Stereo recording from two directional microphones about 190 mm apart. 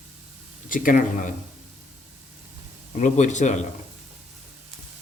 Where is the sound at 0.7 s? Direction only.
45° left (ahead or behind).